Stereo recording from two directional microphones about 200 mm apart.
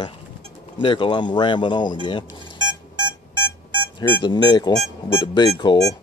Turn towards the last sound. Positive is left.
turn(degrees=20)  # may be behind; listen again after turning